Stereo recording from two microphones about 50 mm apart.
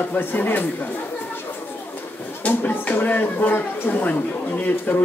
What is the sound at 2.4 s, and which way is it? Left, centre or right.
Speech, left.